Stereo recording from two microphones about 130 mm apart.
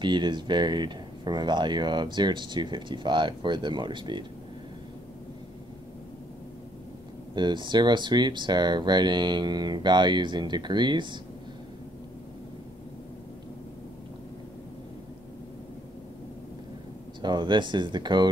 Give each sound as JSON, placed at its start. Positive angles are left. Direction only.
{"t": 0.0, "sound": "speech", "side_deg": -35}
{"t": 7.3, "sound": "speech", "side_deg": -35}
{"t": 17.2, "sound": "speech", "side_deg": -35}